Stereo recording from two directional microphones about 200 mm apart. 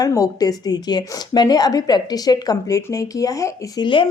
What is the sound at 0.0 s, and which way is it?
A woman's voice, 15° left (ahead or behind).